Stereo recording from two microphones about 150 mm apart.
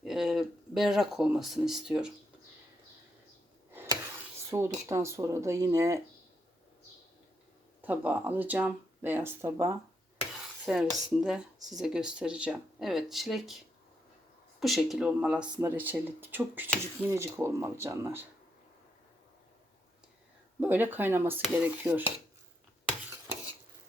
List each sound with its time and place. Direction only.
0.0 s speech: 5° right (ahead or behind)
4.5 s speech: 20° right (ahead or behind)
7.8 s speech: 10° right (ahead or behind)
10.3 s speech: 5° right (ahead or behind)
14.6 s speech: centre (ahead or behind); by 18.3 s 15° right (ahead or behind)
20.6 s speech: 15° right (ahead or behind)